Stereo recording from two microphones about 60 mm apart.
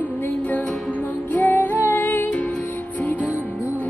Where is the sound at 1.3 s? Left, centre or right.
Left.